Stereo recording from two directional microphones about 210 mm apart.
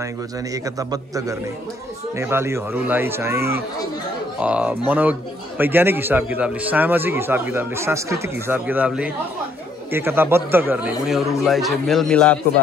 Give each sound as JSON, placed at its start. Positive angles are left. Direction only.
{"t": 0.7, "sound": "a man's voice", "side_deg": -15}